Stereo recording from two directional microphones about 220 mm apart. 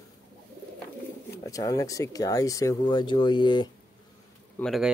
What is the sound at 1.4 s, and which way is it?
Speech, 15° left (ahead or behind).